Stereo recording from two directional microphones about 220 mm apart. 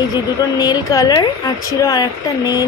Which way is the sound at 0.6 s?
15° left (ahead or behind).